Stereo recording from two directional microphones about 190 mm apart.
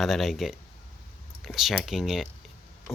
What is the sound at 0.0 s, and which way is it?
Speech, centre (ahead or behind).